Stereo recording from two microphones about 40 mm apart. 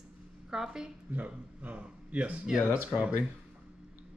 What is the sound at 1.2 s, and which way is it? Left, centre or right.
A man's voice, right.